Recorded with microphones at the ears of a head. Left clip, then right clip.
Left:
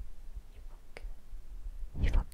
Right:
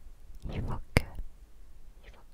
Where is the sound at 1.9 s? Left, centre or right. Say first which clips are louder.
Left 15 dB; left.